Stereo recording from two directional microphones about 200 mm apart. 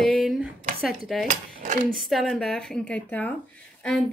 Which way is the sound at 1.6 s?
40° right (ahead or behind).